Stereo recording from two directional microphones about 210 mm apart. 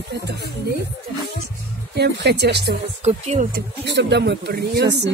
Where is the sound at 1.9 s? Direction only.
50° right (ahead or behind).